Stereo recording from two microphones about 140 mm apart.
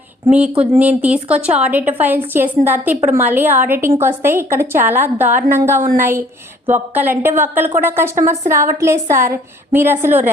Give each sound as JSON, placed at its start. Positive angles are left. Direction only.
{"t": 0.3, "sound": "a woman's voice", "side_deg": -10}